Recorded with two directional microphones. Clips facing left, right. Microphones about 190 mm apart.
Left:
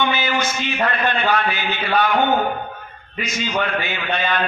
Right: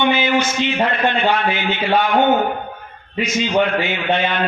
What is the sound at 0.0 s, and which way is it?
A man's voice, 25° right (ahead or behind).